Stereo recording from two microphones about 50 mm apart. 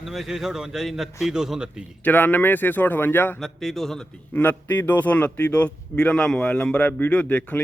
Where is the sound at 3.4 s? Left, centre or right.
Centre.